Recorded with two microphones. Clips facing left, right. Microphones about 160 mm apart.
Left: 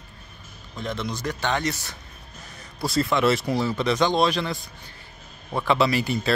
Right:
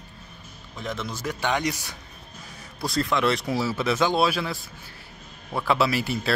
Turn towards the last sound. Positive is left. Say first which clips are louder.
# left 2 dB
turn(degrees=0)  # may be behind; listen again after turning